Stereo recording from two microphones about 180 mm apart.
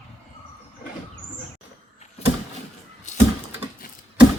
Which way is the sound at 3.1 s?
40° left (ahead or behind).